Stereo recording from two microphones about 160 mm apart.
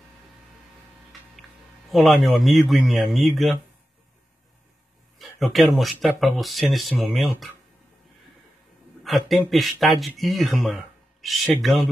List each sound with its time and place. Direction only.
1.1 s a sound: centre (ahead or behind)
1.9 s speech: centre (ahead or behind)
5.4 s speech: centre (ahead or behind)
9.0 s speech: centre (ahead or behind)